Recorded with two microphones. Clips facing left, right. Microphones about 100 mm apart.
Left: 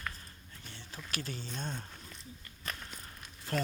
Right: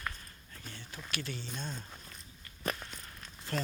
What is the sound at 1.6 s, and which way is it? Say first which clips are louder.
Speech: left 2 dB; 50° left (ahead or behind).